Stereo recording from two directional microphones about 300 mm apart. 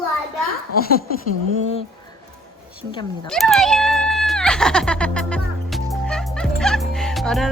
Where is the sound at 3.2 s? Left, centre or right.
Centre.